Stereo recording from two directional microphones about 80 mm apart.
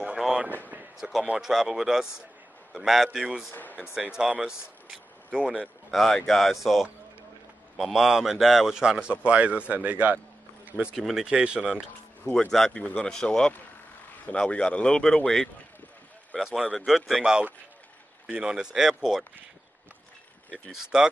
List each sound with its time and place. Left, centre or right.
0.2 s a man's voice: centre
3.5 s speech: left
4.1 s a man's voice: centre
4.8 s a sound: centre
5.9 s a man's voice: centre
11.0 s a man's voice: centre
11.2 s a man's voice: centre
12.3 s speech: centre
16.3 s a man's voice: centre
20.7 s a man's voice: centre